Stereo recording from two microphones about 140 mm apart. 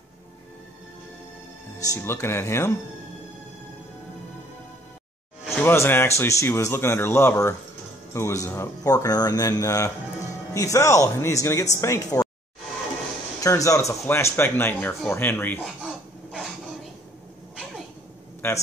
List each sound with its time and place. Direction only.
1.8 s speech: 20° left (ahead or behind)
5.6 s speech: 15° left (ahead or behind)
13.4 s speech: 25° left (ahead or behind)
15.6 s a sound: centre (ahead or behind)
18.4 s speech: 20° left (ahead or behind)